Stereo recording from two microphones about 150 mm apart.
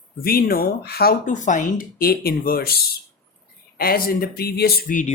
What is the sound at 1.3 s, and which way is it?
Speech, 55° left (ahead or behind).